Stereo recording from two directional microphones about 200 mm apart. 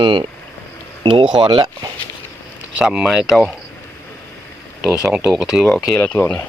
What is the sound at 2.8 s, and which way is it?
Speech, 5° right (ahead or behind).